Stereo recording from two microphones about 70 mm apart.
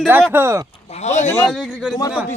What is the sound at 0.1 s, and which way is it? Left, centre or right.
Speech, right.